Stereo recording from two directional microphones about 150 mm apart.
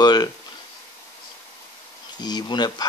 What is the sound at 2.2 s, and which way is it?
Speech, 30° left (ahead or behind).